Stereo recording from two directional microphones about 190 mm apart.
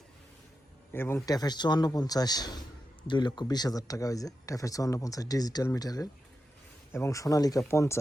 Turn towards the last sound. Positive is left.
turn(degrees=15)  # may be behind; listen again after turning